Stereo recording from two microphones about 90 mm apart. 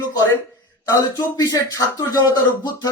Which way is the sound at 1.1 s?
40° left (ahead or behind).